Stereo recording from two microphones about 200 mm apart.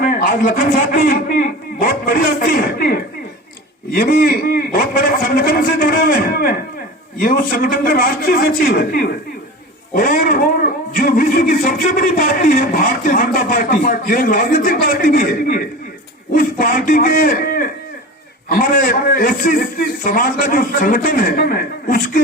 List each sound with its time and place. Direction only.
0.0 s a man's voice: 40° left (ahead or behind)